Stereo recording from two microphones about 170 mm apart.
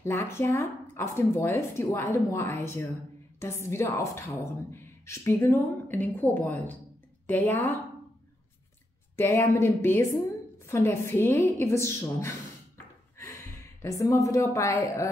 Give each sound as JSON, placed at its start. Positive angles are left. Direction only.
{"t": 0.0, "sound": "a woman's voice", "side_deg": 15}
{"t": 9.1, "sound": "a woman's voice", "side_deg": 15}
{"t": 13.8, "sound": "a woman's voice", "side_deg": 20}